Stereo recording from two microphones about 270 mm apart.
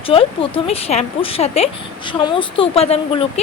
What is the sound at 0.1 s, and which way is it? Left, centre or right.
Speech, centre.